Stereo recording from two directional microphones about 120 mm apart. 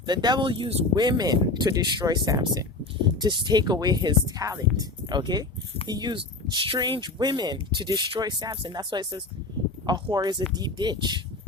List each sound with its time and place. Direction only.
0.0 s speech: 35° right (ahead or behind)